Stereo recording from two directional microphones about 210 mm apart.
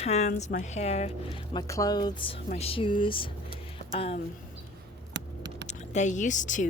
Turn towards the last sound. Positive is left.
turn(degrees=35)  # may be behind; listen again after turning